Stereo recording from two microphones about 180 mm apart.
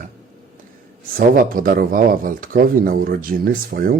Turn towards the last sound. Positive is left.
turn(degrees=-50)  # may be behind; listen again after turning